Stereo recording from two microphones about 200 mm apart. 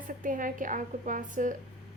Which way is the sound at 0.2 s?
40° right (ahead or behind).